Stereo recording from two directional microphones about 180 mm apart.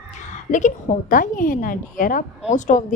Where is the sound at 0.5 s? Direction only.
45° left (ahead or behind).